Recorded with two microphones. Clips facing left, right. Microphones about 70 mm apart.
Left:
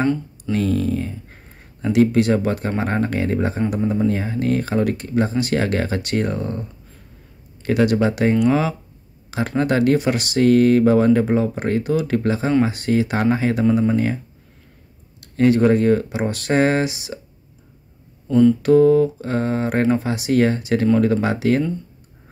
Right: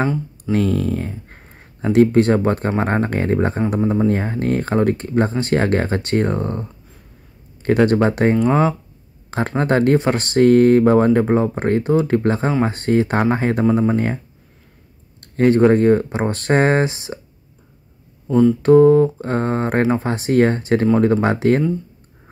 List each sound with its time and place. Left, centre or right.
0.5 s speech: right
18.2 s a sound: centre
18.6 s speech: right